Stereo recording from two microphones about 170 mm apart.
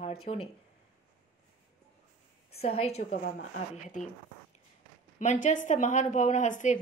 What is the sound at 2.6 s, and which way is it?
Speech, 35° left (ahead or behind).